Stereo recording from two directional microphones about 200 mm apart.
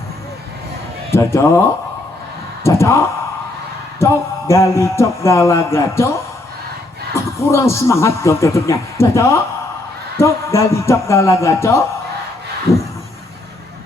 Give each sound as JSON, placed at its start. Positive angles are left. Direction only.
{"t": 1.1, "sound": "a man's voice", "side_deg": 15}
{"t": 2.6, "sound": "a man's voice", "side_deg": 15}
{"t": 12.7, "sound": "a sound", "side_deg": 15}